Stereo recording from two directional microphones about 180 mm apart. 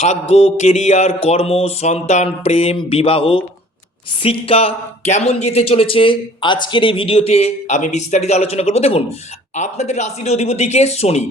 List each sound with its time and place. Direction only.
0.0 s speech: 35° left (ahead or behind)